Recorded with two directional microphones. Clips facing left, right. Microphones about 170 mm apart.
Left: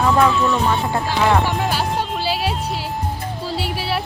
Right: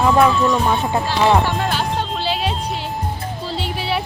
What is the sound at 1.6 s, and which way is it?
Music, 5° left (ahead or behind).